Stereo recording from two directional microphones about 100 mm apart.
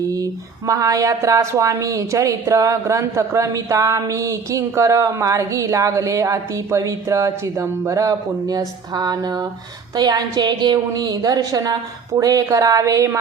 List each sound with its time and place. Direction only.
0.7 s speech: 35° right (ahead or behind)